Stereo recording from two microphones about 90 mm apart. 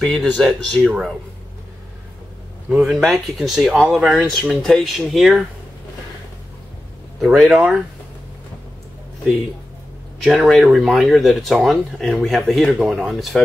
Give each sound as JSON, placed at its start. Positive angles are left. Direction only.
{"t": 0.0, "sound": "speech", "side_deg": 5}
{"t": 2.7, "sound": "speech", "side_deg": 0}
{"t": 7.2, "sound": "speech", "side_deg": -5}
{"t": 10.4, "sound": "speech", "side_deg": 0}